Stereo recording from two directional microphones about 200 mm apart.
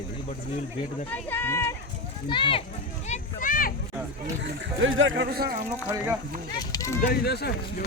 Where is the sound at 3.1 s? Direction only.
40° left (ahead or behind).